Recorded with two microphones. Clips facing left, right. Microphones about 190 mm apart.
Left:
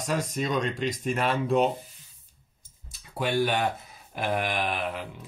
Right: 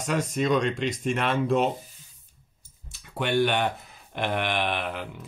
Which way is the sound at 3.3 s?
40° left (ahead or behind).